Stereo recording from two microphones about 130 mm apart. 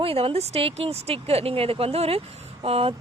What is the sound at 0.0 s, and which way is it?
Speech, 45° right (ahead or behind).